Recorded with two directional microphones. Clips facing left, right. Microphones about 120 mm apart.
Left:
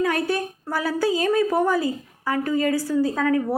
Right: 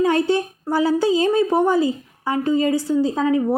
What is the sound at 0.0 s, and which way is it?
A woman's voice, 25° right (ahead or behind).